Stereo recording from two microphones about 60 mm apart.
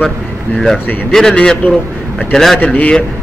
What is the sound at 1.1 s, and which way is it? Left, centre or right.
Speech, centre.